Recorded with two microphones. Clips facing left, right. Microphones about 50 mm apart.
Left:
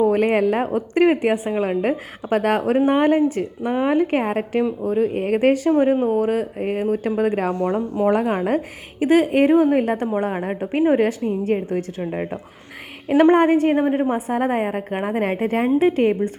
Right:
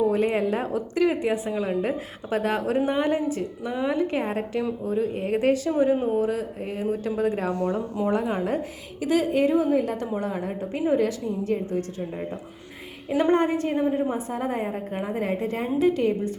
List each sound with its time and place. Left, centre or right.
0.0 s a woman's voice: left
3.9 s a woman's voice: left
15.8 s a woman's voice: left